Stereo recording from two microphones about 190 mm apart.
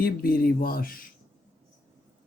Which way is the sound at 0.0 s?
50° left (ahead or behind).